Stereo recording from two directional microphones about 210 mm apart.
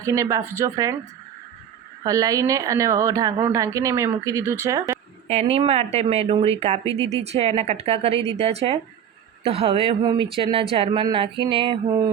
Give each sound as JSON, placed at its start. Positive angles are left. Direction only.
{"t": 0.0, "sound": "a woman's voice", "side_deg": -15}
{"t": 2.0, "sound": "a woman's voice", "side_deg": -15}
{"t": 5.3, "sound": "speech", "side_deg": -30}